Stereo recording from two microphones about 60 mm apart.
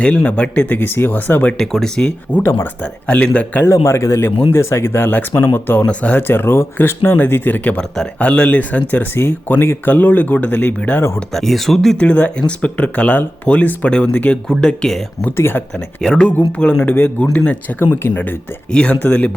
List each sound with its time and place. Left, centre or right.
0.0 s speech: centre
1.5 s speech: centre
2.4 s speech: left
2.8 s speech: centre
3.6 s speech: left
5.8 s speech: left
6.1 s speech: left
9.1 s speech: left
11.3 s speech: centre
11.9 s speech: left
15.4 s speech: left
16.0 s speech: centre
16.8 s speech: left